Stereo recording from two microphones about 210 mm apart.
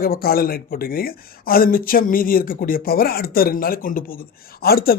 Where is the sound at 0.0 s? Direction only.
45° left (ahead or behind).